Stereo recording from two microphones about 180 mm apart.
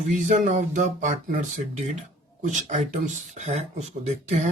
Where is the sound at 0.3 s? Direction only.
40° right (ahead or behind).